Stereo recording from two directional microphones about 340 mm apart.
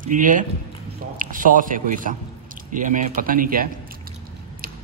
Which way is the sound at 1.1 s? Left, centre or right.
Right.